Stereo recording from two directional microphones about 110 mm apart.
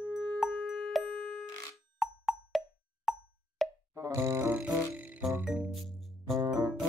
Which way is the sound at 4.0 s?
30° right (ahead or behind).